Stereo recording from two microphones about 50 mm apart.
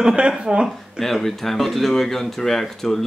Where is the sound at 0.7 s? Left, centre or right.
Centre.